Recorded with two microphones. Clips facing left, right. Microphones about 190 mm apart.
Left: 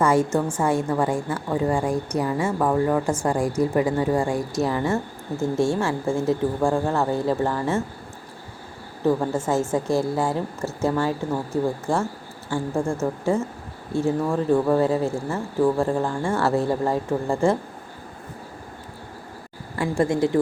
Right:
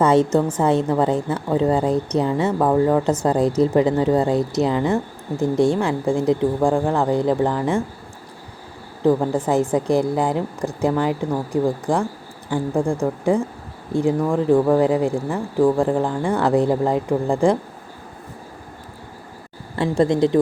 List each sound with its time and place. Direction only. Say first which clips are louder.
0.0 s a woman's voice: right 4 dB; 20° right (ahead or behind)
9.0 s speech: right 4 dB; 15° right (ahead or behind)
19.7 s a woman's voice: right 4 dB; 20° right (ahead or behind)